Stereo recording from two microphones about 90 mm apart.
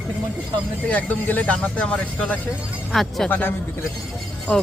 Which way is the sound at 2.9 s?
Centre (ahead or behind).